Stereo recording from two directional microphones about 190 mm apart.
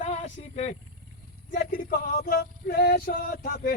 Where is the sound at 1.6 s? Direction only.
45° left (ahead or behind).